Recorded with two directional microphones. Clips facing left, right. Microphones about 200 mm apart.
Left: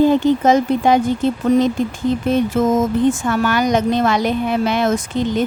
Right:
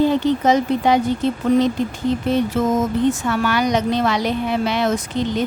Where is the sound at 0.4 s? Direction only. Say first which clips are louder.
Left 2 dB; 50° left (ahead or behind).